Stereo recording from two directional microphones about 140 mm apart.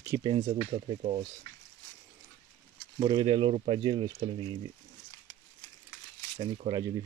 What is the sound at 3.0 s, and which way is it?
Speech, 35° right (ahead or behind).